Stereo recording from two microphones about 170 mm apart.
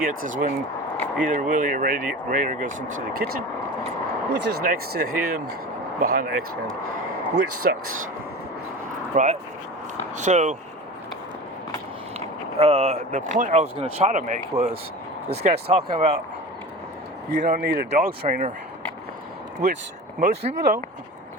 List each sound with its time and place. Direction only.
0.0 s speech: 50° right (ahead or behind)
4.3 s speech: 80° right
4.6 s speech: 60° right (ahead or behind)
9.1 s speech: 45° right (ahead or behind)
12.5 s speech: 40° right (ahead or behind)
14.1 s speech: 45° right (ahead or behind)
17.6 s speech: 70° right (ahead or behind)
17.9 s speech: 55° right (ahead or behind)
20.1 s speech: 55° right (ahead or behind)